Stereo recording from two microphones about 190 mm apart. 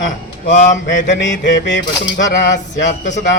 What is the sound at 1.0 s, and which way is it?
Mantra, 70° left (ahead or behind).